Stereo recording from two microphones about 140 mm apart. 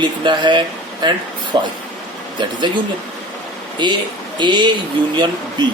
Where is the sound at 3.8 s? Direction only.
30° right (ahead or behind).